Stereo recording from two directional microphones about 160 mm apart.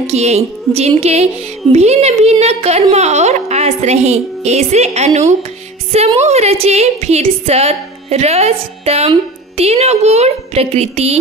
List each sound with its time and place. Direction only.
0.0 s music: 40° right (ahead or behind)
0.7 s a woman's voice: 40° right (ahead or behind)